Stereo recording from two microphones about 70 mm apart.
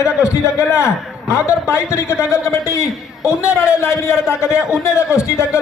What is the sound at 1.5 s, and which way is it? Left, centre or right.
A man's voice, left.